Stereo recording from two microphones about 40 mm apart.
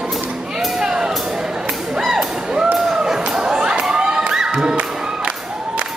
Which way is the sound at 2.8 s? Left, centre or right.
Centre.